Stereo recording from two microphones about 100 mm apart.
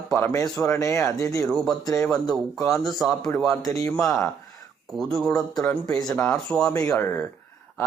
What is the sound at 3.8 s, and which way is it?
Speech, 30° left (ahead or behind).